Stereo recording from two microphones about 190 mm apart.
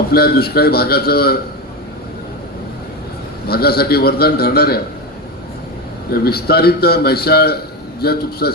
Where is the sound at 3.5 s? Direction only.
55° left (ahead or behind).